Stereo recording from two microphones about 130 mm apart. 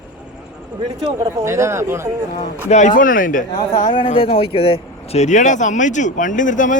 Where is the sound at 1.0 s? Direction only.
25° right (ahead or behind).